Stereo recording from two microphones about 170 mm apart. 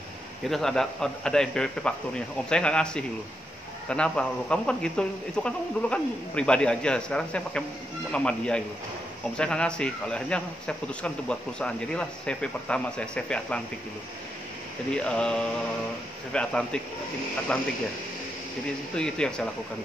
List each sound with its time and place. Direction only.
0.5 s a man's voice: centre (ahead or behind)
14.9 s a man's voice: 5° left (ahead or behind)
18.9 s a man's voice: 5° left (ahead or behind)